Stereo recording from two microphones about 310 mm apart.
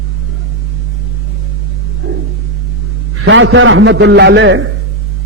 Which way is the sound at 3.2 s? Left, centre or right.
Right.